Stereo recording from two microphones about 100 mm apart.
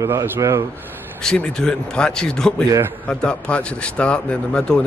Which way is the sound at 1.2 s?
5° left (ahead or behind).